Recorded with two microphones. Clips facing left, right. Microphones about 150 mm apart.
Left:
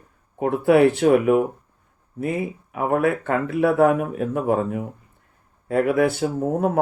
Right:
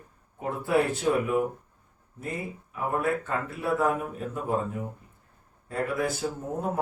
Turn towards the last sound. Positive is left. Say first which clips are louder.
# left 9 dB
turn(degrees=65)  # may be behind; listen again after turning